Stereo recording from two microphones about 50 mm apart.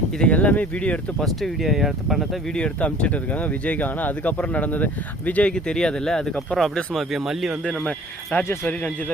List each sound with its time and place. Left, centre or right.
0.3 s speech: left
1.2 s speech: centre
2.6 s speech: left
5.5 s speech: centre
6.9 s speech: centre
7.9 s speech: left